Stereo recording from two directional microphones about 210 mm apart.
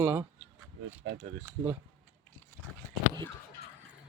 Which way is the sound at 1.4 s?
10° right (ahead or behind).